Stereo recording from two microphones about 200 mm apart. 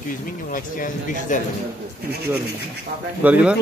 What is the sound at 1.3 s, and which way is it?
Speech, 40° left (ahead or behind).